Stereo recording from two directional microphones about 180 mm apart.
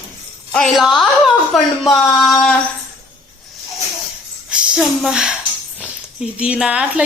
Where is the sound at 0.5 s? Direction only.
Centre (ahead or behind).